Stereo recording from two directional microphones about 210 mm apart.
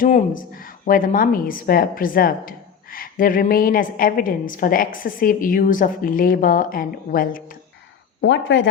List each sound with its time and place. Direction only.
0.0 s speech: 40° left (ahead or behind)
8.2 s speech: 60° left (ahead or behind)